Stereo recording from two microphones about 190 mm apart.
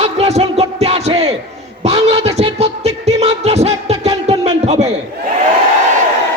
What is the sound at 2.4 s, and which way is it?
Music, 35° right (ahead or behind).